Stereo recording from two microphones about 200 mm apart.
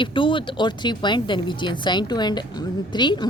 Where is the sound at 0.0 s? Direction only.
25° left (ahead or behind).